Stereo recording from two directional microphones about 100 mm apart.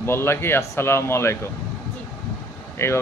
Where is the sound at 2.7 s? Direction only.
25° left (ahead or behind).